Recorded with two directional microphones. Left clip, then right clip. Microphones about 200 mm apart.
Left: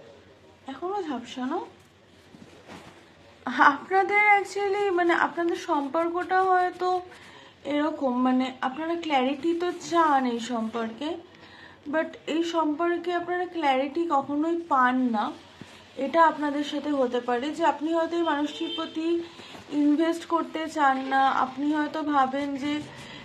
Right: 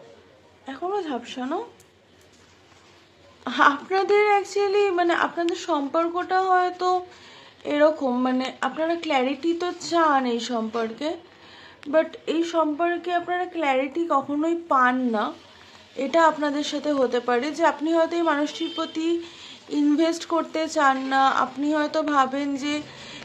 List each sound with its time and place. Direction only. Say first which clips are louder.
0.7 s speech: right 3 dB; 25° right (ahead or behind)
3.4 s speech: right 1 dB; 20° right (ahead or behind)